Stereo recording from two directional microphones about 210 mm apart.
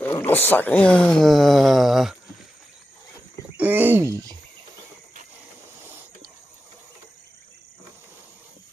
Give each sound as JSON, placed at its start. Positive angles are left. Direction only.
{"t": 0.0, "sound": "speech", "side_deg": 10}
{"t": 3.6, "sound": "speech", "side_deg": -10}